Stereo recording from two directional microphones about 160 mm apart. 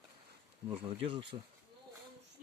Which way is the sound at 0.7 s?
35° right (ahead or behind).